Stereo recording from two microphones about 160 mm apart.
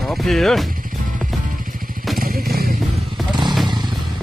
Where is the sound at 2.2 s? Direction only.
70° right (ahead or behind).